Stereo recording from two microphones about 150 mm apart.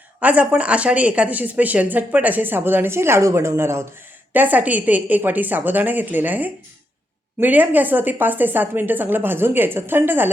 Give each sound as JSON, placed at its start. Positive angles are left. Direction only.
{"t": 0.2, "sound": "speech", "side_deg": -10}